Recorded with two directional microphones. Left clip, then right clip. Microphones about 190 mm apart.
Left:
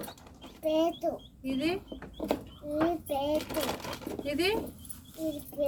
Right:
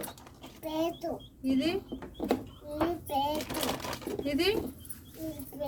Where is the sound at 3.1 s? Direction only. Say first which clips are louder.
Right 1 dB; 15° left (ahead or behind).